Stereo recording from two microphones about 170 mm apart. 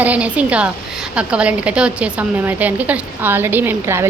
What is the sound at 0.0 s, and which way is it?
A woman's voice, 10° right (ahead or behind).